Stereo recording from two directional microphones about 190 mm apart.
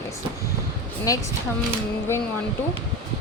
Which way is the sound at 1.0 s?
15° left (ahead or behind).